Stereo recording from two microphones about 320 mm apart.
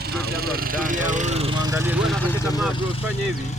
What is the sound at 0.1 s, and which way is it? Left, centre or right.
Speech, right.